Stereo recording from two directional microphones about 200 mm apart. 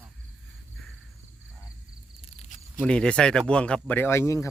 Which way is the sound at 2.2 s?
35° left (ahead or behind).